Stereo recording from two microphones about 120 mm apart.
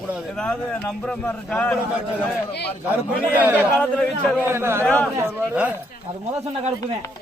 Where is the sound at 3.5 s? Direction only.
10° left (ahead or behind).